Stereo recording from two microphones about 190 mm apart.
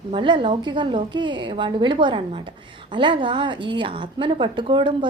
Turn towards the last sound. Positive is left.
turn(degrees=-25)  # may be behind; listen again after turning